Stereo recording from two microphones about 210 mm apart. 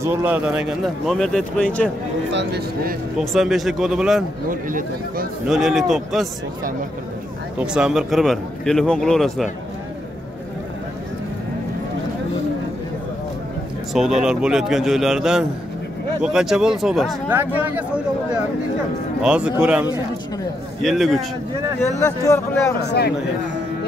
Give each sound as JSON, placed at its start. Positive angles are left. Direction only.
{"t": 0.0, "sound": "speech", "side_deg": -10}
{"t": 2.3, "sound": "speech", "side_deg": -50}
{"t": 3.2, "sound": "speech", "side_deg": 0}
{"t": 4.5, "sound": "speech", "side_deg": -40}
{"t": 5.5, "sound": "speech", "side_deg": 0}
{"t": 7.5, "sound": "speech", "side_deg": -5}
{"t": 13.9, "sound": "speech", "side_deg": 0}
{"t": 22.0, "sound": "speech", "side_deg": 15}
{"t": 22.8, "sound": "speech", "side_deg": 50}